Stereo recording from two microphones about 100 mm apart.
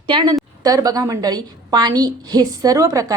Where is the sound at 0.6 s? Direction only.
35° right (ahead or behind).